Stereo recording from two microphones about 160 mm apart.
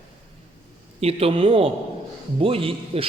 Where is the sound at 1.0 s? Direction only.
35° right (ahead or behind).